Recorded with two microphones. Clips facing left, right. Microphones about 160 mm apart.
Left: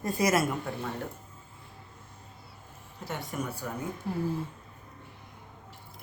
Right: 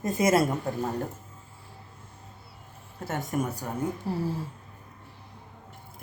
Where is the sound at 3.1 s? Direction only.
45° right (ahead or behind).